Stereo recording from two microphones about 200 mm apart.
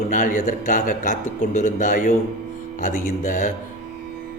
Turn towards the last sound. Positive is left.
turn(degrees=40)  # may be behind; listen again after turning